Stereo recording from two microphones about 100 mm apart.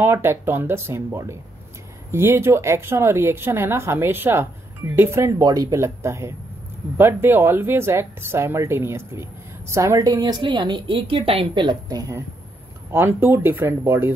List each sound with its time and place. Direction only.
0.0 s speech: 25° right (ahead or behind)
5.4 s speech: 35° right (ahead or behind)
12.9 s speech: 20° right (ahead or behind)